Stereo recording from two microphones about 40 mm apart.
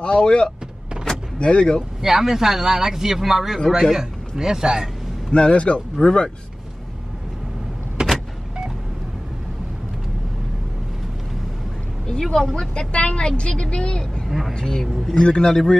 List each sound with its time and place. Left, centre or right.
0.0 s a woman's voice: left
2.0 s speech: centre
5.3 s a man's voice: left
8.0 s power windows: centre
12.2 s a man's voice: centre
14.6 s a man's voice: centre